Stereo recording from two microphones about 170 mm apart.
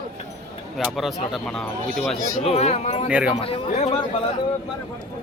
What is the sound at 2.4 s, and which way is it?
Speech, 40° left (ahead or behind).